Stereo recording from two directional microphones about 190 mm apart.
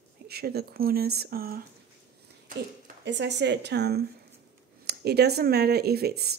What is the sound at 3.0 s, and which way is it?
Speech, 65° right (ahead or behind).